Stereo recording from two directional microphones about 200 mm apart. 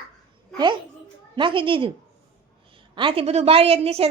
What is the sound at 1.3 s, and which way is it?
A woman's voice, 25° right (ahead or behind).